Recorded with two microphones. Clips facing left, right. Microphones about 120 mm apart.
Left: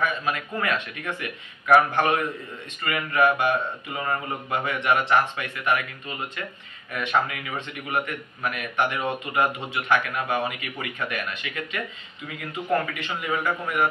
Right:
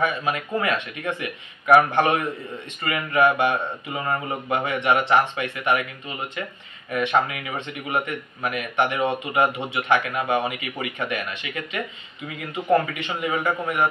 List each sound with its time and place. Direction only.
0.0 s a man's voice: 20° right (ahead or behind)
12.5 s a man's voice: 20° right (ahead or behind)